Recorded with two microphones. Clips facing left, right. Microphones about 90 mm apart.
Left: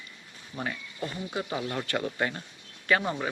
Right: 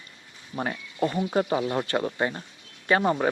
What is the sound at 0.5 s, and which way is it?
Speech, 40° right (ahead or behind).